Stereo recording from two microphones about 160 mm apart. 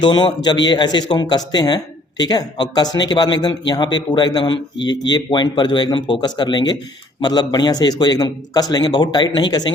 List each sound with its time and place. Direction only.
0.0 s speech: 30° left (ahead or behind)